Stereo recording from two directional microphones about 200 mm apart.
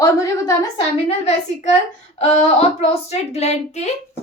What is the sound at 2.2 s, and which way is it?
Speech, 30° left (ahead or behind).